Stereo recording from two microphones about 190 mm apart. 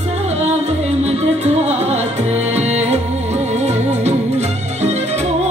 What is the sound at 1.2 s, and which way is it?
Music, 35° right (ahead or behind).